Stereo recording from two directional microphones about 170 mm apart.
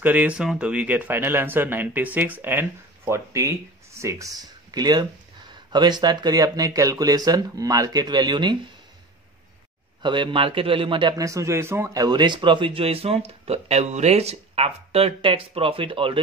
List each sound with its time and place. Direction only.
0.0 s speech: 10° right (ahead or behind); by 8.5 s 25° right (ahead or behind)
10.0 s a man's voice: 30° right (ahead or behind)